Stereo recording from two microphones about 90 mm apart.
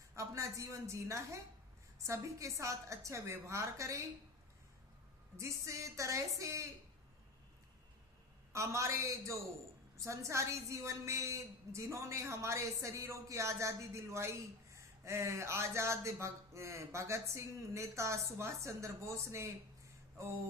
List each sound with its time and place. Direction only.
0.2 s a woman's voice: 35° right (ahead or behind)
5.4 s a woman's voice: 35° right (ahead or behind)
8.5 s a woman's voice: 35° right (ahead or behind)